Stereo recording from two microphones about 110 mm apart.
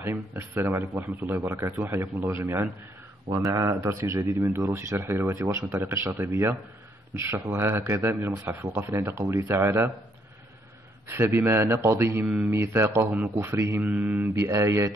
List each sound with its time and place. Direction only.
0.0 s speech: 20° right (ahead or behind)
11.1 s speech: 20° right (ahead or behind)
12.3 s speech: 10° right (ahead or behind)
12.5 s speech: 25° right (ahead or behind)
14.3 s speech: 30° right (ahead or behind)